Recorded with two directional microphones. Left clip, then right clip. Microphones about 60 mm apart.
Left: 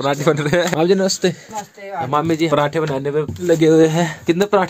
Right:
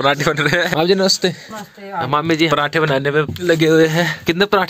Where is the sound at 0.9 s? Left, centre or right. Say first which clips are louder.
Right 1 dB; centre.